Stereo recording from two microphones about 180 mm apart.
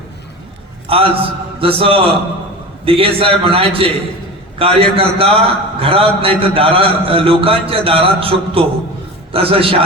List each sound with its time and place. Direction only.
0.9 s a man's voice: 30° right (ahead or behind)